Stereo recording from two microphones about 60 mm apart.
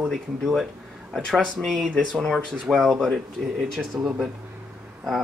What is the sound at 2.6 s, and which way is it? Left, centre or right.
Speech, centre.